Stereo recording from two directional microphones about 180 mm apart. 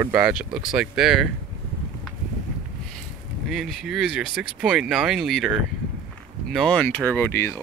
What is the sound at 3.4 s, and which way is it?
Speech, centre (ahead or behind).